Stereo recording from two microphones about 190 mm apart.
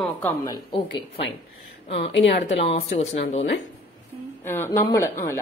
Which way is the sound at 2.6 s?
35° left (ahead or behind).